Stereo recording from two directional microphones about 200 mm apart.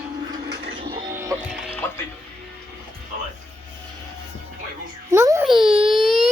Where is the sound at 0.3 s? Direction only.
25° right (ahead or behind).